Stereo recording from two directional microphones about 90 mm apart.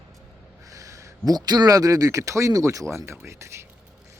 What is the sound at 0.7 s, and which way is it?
A man's voice, 35° right (ahead or behind).